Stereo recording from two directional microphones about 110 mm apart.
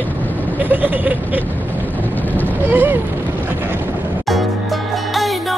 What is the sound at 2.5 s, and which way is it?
Speech, 20° right (ahead or behind).